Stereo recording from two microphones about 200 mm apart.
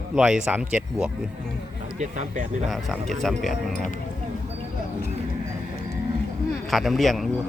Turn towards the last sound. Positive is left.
turn(degrees=0)  # may be behind; listen again after turning